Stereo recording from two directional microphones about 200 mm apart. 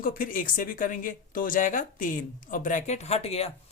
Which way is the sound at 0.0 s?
45° left (ahead or behind).